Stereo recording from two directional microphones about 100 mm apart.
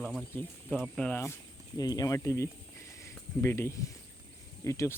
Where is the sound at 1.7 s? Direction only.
40° left (ahead or behind).